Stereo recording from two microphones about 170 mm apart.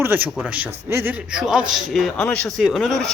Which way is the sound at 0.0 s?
10° right (ahead or behind).